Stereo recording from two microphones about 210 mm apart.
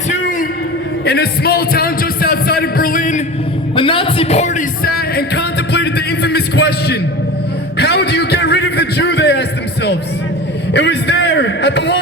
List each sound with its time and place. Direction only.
1.0 s speech: 50° left (ahead or behind)
3.8 s speech: 25° left (ahead or behind); by 7.0 s 50° left (ahead or behind)
7.8 s a sound: 50° left (ahead or behind)